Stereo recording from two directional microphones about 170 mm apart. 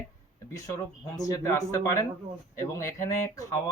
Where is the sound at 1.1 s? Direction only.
20° left (ahead or behind).